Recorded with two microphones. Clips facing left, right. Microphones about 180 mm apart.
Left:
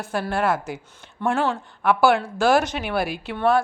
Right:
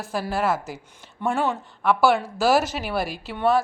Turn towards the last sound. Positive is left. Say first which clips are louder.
# left 2 dB
turn(degrees=0)  # may be behind; listen again after turning